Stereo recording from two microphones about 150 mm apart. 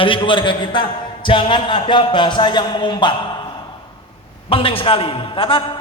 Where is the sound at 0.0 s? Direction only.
35° left (ahead or behind).